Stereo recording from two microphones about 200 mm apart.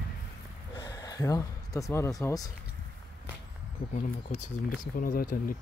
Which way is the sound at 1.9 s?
15° left (ahead or behind).